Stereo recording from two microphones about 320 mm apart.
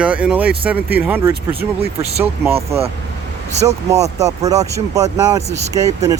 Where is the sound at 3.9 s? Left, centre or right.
Centre.